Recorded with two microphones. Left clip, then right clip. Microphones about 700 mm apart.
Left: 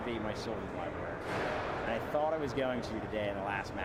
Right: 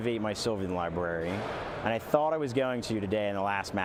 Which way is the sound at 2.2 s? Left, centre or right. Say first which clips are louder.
Right 4 dB; right.